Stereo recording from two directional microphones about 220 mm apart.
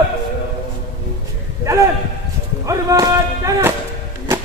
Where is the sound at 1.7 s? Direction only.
15° right (ahead or behind).